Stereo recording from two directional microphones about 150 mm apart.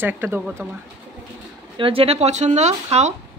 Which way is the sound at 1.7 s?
40° right (ahead or behind).